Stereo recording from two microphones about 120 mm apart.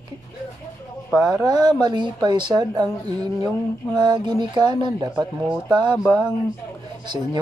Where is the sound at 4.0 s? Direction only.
40° right (ahead or behind).